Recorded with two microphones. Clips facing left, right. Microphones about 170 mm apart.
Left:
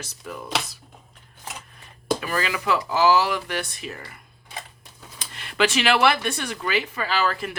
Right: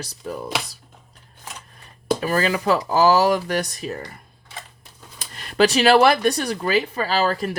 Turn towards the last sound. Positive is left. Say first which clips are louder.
# right 4 dB
turn(degrees=-35)  # may be behind; listen again after turning